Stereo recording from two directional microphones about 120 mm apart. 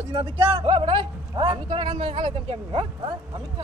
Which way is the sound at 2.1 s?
55° right (ahead or behind).